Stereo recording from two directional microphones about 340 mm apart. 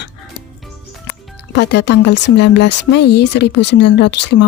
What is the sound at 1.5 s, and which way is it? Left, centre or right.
Speech, left.